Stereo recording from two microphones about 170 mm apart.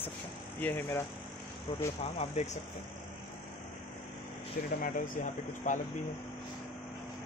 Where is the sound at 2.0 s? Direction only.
40° left (ahead or behind).